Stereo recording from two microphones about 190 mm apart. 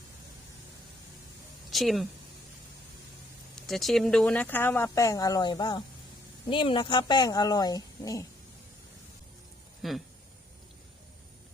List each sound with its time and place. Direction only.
1.7 s speech: centre (ahead or behind)
3.5 s speech: centre (ahead or behind); by 8.3 s 15° left (ahead or behind)
9.8 s speech: centre (ahead or behind)